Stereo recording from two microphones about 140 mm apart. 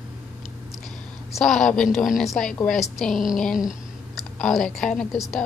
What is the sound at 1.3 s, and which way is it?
Speech, 5° left (ahead or behind).